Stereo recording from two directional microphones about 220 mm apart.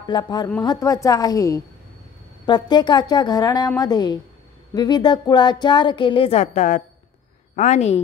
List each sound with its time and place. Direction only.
0.0 s a woman's voice: 20° left (ahead or behind)